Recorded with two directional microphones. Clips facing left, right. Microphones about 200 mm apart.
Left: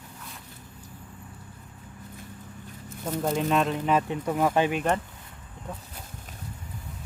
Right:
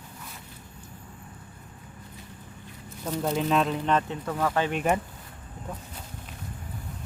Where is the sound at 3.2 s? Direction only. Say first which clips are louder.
Even; centre (ahead or behind); by 4.7 s 15° left (ahead or behind).